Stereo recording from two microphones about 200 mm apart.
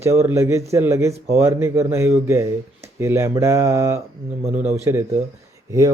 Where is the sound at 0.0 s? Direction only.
15° right (ahead or behind).